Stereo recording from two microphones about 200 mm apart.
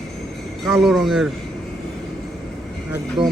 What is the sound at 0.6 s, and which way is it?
Speech, centre (ahead or behind).